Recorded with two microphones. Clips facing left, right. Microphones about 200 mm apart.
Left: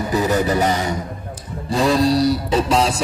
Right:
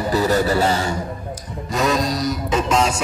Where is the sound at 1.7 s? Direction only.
30° left (ahead or behind).